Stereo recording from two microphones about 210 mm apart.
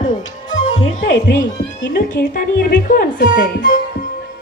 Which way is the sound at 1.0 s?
60° left (ahead or behind).